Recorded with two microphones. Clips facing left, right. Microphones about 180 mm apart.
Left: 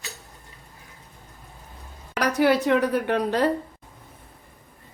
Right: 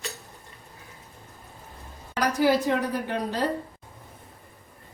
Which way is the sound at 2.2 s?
65° left (ahead or behind).